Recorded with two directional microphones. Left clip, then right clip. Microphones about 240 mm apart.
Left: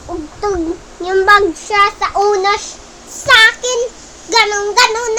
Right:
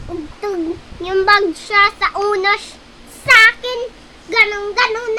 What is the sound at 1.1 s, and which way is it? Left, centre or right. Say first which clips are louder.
Speech: left 3 dB; centre.